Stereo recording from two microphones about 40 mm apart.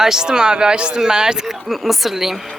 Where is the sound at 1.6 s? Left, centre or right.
Centre.